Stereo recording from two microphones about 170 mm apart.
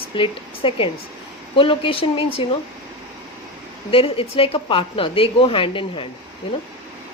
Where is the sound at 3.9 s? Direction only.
35° left (ahead or behind).